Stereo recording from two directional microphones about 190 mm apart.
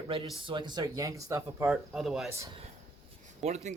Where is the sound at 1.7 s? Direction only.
Centre (ahead or behind).